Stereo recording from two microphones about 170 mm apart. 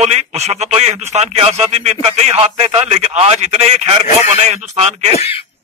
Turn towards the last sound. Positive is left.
turn(degrees=35)  # may be behind; listen again after turning